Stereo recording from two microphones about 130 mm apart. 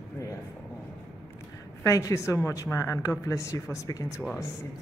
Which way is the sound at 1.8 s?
25° left (ahead or behind).